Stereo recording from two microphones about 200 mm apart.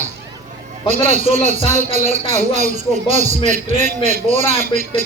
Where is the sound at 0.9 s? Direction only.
35° right (ahead or behind).